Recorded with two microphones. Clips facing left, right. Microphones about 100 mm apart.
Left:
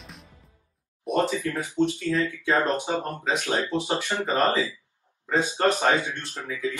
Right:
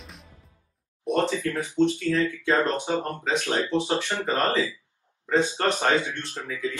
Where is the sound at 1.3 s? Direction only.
20° left (ahead or behind).